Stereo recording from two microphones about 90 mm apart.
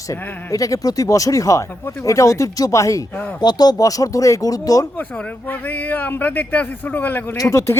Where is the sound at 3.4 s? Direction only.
50° left (ahead or behind).